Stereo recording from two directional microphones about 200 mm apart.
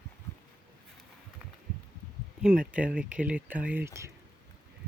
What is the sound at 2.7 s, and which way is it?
Speech, 5° right (ahead or behind).